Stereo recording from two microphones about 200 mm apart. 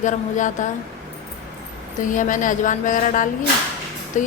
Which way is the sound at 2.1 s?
40° left (ahead or behind).